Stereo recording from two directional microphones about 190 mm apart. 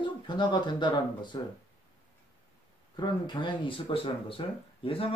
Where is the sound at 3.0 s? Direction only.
25° left (ahead or behind).